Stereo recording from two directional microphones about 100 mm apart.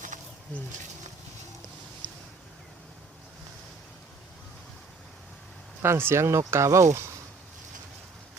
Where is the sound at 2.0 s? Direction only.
15° left (ahead or behind).